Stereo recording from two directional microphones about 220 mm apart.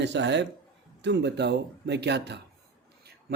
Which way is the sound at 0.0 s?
50° right (ahead or behind).